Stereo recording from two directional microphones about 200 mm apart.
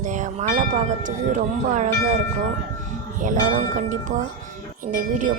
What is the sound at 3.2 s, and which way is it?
Speech, 40° right (ahead or behind).